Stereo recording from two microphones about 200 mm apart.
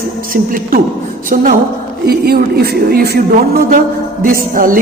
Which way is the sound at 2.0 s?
50° right (ahead or behind).